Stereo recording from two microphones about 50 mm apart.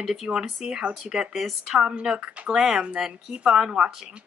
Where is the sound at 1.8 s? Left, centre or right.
Centre.